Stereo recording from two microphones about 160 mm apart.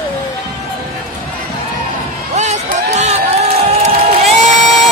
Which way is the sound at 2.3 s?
45° right (ahead or behind).